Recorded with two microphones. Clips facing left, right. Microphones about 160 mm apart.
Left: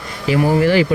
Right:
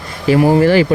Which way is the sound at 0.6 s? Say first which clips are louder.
Right 3 dB; 40° right (ahead or behind).